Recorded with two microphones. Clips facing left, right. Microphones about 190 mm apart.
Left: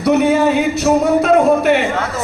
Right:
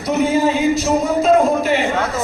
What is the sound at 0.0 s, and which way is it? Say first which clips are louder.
Speech: left 4 dB; 70° left (ahead or behind).